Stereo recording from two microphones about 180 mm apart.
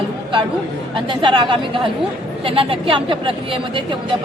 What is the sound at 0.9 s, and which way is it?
Speech, 25° right (ahead or behind).